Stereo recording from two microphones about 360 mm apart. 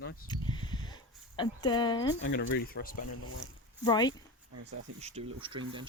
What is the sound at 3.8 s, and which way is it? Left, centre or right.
Speech, centre.